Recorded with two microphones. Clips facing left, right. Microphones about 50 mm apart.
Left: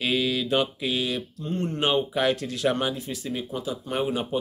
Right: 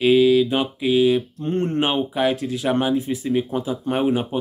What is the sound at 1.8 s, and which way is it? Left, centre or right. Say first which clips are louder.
Speech: even; centre.